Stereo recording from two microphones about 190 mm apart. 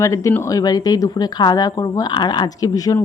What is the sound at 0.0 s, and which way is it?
Speech, 15° left (ahead or behind).